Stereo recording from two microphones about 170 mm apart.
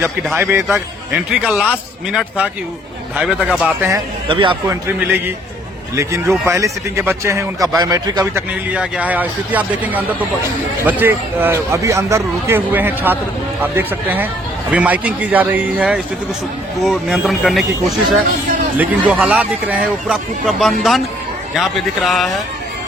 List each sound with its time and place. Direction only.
0.3 s a man's voice: 10° right (ahead or behind)
4.3 s a man's voice: 30° right (ahead or behind)
4.7 s a man's voice: 10° right (ahead or behind)
6.2 s speech: centre (ahead or behind)
6.5 s a man's voice: 15° right (ahead or behind)
8.7 s a man's voice: 5° right (ahead or behind)